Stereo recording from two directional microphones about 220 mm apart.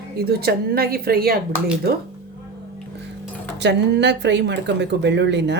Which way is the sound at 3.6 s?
50° right (ahead or behind).